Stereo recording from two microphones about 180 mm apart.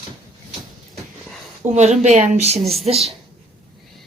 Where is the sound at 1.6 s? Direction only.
40° right (ahead or behind).